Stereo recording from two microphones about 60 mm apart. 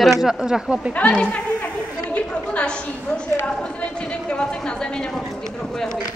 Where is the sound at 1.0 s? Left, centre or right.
Centre.